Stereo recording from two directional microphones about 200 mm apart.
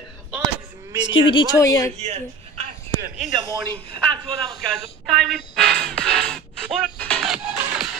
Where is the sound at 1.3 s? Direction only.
20° left (ahead or behind).